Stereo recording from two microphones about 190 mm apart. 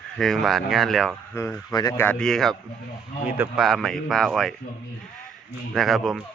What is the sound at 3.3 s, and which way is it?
Speech, 10° right (ahead or behind).